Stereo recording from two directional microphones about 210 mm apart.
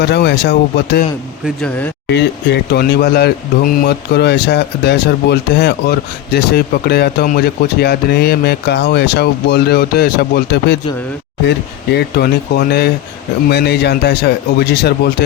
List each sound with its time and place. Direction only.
0.0 s speech: 50° left (ahead or behind)
1.5 s speech: 5° left (ahead or behind)
2.0 s speech: 55° left (ahead or behind)